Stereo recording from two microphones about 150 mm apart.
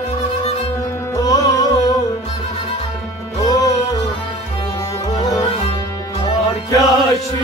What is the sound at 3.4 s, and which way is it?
Music, 20° left (ahead or behind).